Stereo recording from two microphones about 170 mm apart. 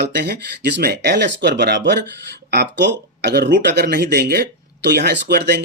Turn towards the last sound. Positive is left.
turn(degrees=-70)  # may be behind; listen again after turning